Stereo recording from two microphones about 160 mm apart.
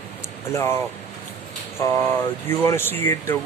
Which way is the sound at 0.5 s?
15° left (ahead or behind).